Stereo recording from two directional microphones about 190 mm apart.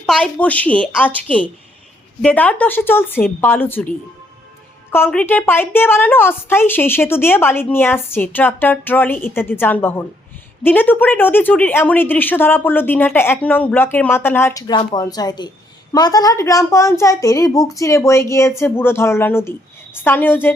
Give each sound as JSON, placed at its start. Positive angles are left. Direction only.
{"t": 0.0, "sound": "a woman's voice", "side_deg": 5}